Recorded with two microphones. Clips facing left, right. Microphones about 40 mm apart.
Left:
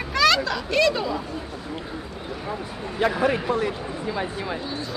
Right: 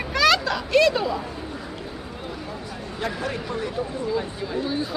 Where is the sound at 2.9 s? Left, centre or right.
Left.